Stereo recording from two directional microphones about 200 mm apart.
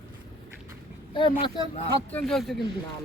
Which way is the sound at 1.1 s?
25° left (ahead or behind).